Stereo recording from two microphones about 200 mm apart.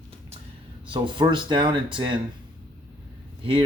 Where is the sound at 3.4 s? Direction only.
25° right (ahead or behind).